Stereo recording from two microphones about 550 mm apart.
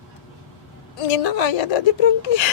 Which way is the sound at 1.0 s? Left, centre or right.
Left.